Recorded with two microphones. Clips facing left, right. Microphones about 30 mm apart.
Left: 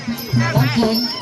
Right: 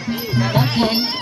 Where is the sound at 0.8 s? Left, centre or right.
Right.